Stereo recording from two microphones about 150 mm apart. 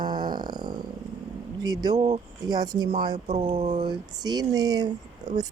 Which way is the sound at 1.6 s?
25° right (ahead or behind).